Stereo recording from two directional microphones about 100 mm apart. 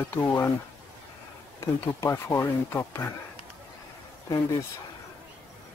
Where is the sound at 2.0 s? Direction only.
25° left (ahead or behind).